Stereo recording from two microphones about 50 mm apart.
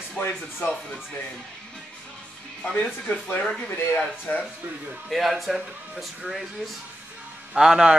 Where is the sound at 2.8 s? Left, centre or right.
Left.